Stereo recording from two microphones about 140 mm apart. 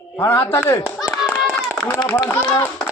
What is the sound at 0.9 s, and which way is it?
Clapping, centre (ahead or behind).